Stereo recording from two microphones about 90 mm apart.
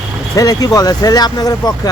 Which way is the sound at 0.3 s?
40° left (ahead or behind).